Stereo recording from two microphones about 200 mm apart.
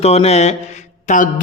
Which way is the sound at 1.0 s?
40° left (ahead or behind).